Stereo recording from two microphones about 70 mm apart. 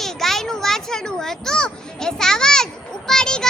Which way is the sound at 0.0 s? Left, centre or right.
Centre.